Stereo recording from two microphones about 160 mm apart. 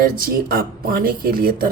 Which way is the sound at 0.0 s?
65° right (ahead or behind).